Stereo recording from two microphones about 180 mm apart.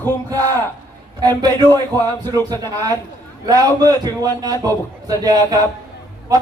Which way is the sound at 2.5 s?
20° right (ahead or behind).